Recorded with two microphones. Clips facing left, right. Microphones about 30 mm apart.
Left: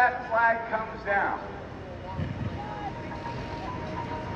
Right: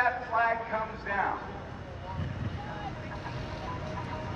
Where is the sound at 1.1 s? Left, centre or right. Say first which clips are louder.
Left 5 dB; centre.